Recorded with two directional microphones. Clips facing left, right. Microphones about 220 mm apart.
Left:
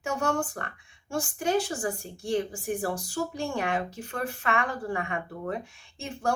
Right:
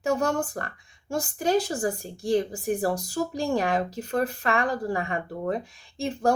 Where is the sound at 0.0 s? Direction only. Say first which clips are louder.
Right 4 dB; 35° right (ahead or behind).